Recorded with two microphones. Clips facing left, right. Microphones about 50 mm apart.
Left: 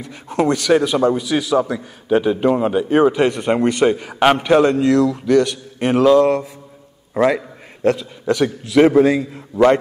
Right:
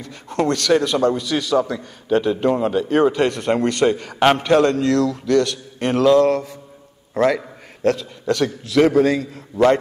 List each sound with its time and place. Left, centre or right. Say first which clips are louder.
0.0 s a man's voice: left 2 dB; centre